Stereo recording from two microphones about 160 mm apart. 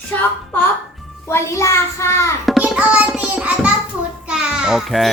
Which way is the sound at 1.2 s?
15° left (ahead or behind).